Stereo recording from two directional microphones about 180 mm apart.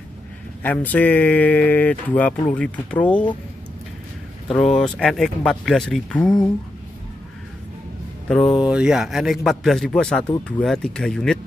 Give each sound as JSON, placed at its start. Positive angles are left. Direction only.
{"t": 0.6, "sound": "speech", "side_deg": 10}
{"t": 4.5, "sound": "a man's voice", "side_deg": 0}
{"t": 8.3, "sound": "a man's voice", "side_deg": 0}